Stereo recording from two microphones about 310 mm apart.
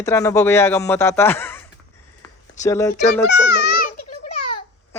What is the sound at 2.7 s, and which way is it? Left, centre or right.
Speech, centre.